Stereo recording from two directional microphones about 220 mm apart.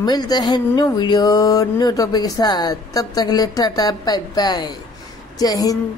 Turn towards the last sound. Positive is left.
turn(degrees=15)  # may be behind; listen again after turning